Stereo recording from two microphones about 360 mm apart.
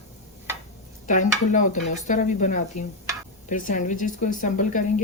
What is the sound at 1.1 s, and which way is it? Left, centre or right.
Speech, left.